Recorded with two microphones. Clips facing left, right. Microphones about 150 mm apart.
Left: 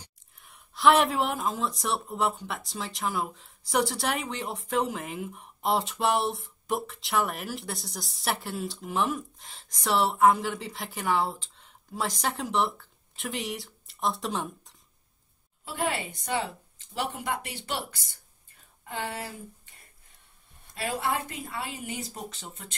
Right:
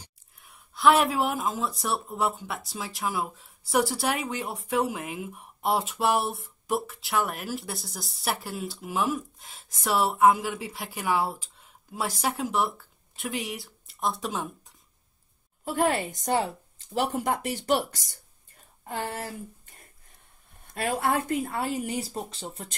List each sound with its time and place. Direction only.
0.4 s speech: centre (ahead or behind)
15.6 s a woman's voice: 45° right (ahead or behind)
20.7 s a woman's voice: 50° right (ahead or behind)